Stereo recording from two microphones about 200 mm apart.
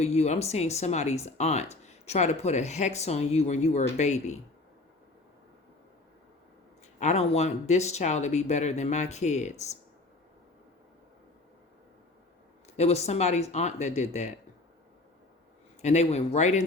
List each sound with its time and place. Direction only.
0.0 s speech: 35° left (ahead or behind)
7.0 s speech: 35° left (ahead or behind)
12.7 s speech: 35° left (ahead or behind)
15.8 s speech: 35° left (ahead or behind)